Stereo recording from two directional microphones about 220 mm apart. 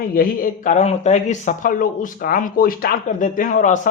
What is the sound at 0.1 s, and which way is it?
Speech, 40° left (ahead or behind).